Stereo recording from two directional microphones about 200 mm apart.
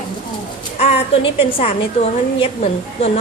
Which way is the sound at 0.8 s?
30° left (ahead or behind).